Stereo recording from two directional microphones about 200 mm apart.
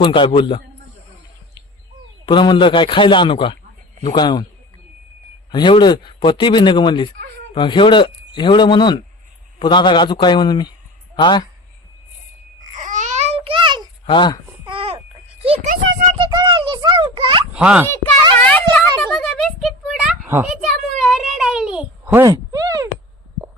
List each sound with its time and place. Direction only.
0.0 s a man's voice: 25° left (ahead or behind)
2.2 s a man's voice: 25° left (ahead or behind)
5.5 s a man's voice: 25° left (ahead or behind)
12.7 s babbling: 40° right (ahead or behind)
14.0 s speech: 25° left (ahead or behind)
14.6 s babbling: 25° right (ahead or behind)
15.4 s a child's voice: 30° right (ahead or behind)
16.1 s a sound: 25° right (ahead or behind)
17.5 s a child's voice: 5° right (ahead or behind)
18.3 s a sound: 5° left (ahead or behind); by 22.9 s 20° right (ahead or behind)